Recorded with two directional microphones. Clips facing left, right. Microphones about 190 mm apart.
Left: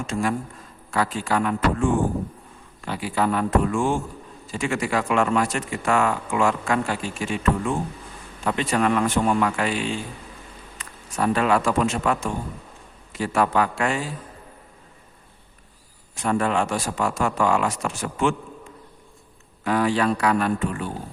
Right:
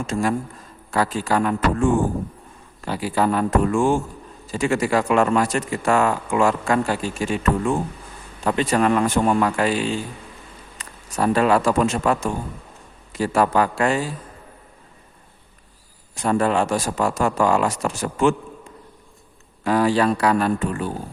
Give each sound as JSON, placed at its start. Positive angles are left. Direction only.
{"t": 0.1, "sound": "speech", "side_deg": -40}
{"t": 8.4, "sound": "a man's voice", "side_deg": -35}
{"t": 16.1, "sound": "speech", "side_deg": -35}
{"t": 19.6, "sound": "speech", "side_deg": -35}